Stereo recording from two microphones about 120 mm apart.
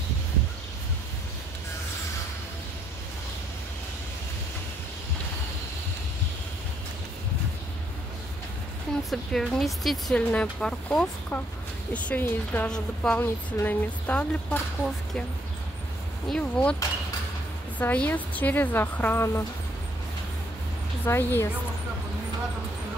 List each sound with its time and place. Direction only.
9.1 s speech: 5° left (ahead or behind)
13.2 s speech: 15° left (ahead or behind)
16.3 s speech: 10° left (ahead or behind)
17.7 s speech: 15° left (ahead or behind)
21.0 s a woman's voice: 20° left (ahead or behind)